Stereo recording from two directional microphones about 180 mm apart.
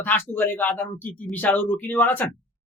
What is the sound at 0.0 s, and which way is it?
A man's voice, 10° left (ahead or behind).